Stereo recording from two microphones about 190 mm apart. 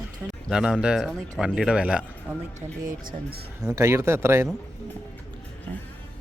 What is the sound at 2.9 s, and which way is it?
Speech, 45° right (ahead or behind).